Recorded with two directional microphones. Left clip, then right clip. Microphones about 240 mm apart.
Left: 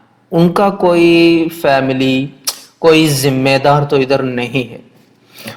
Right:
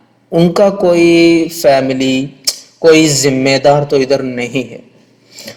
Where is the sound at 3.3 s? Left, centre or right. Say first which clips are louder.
Even; centre.